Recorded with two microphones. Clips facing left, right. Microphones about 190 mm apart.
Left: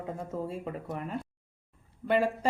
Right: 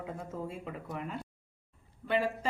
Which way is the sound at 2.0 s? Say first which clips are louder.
Left 4 dB; 45° left (ahead or behind).